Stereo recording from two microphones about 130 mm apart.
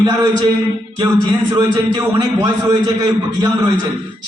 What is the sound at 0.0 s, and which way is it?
A man's voice, 30° right (ahead or behind).